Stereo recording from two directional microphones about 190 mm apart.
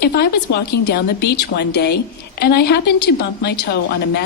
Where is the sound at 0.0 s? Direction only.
60° left (ahead or behind).